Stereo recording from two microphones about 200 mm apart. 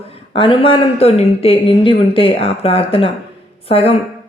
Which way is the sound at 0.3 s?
25° left (ahead or behind).